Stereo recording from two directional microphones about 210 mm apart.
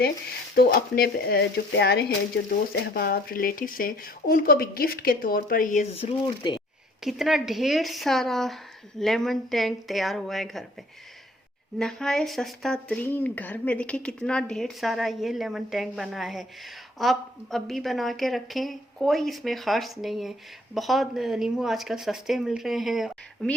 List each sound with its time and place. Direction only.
0.5 s speech: 45° left (ahead or behind); by 6.6 s 20° left (ahead or behind)
7.0 s speech: centre (ahead or behind)
11.8 s speech: centre (ahead or behind)